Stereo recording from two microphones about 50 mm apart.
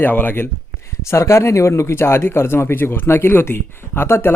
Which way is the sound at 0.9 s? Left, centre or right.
Left.